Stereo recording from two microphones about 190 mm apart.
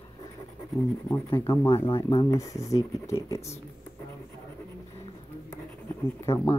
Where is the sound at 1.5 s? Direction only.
15° left (ahead or behind).